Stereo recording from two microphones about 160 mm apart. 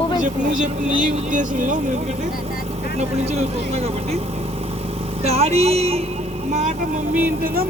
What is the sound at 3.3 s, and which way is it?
Speech, 40° right (ahead or behind).